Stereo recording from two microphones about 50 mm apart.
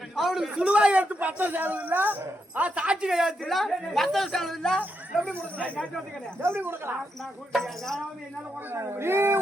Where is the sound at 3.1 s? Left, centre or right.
Centre.